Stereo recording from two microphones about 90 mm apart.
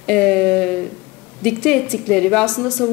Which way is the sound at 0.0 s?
10° left (ahead or behind).